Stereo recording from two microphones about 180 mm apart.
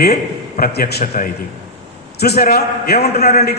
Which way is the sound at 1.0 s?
45° left (ahead or behind).